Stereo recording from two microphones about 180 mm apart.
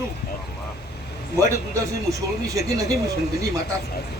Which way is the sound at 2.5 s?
20° right (ahead or behind).